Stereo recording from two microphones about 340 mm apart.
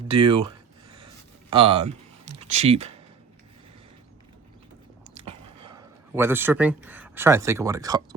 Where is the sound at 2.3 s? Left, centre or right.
Centre.